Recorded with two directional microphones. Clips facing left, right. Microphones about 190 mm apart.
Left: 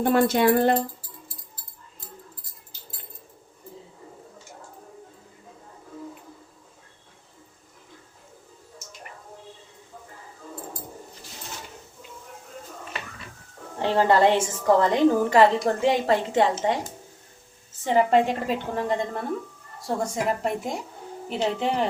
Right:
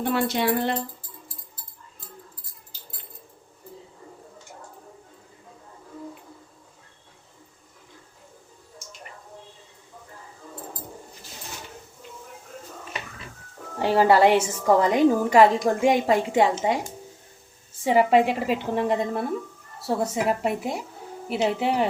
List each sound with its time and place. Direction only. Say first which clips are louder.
0.0 s speech: left 4 dB; 45° left (ahead or behind)
13.8 s a woman's voice: right 2 dB; 10° right (ahead or behind)
17.8 s a woman's voice: right 1 dB; 10° right (ahead or behind)